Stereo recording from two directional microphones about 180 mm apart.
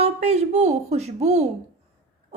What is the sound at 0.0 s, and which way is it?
A woman's voice, 35° right (ahead or behind).